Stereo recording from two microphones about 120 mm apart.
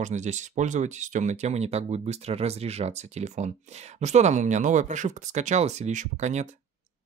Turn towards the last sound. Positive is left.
turn(degrees=-75)  # may be behind; listen again after turning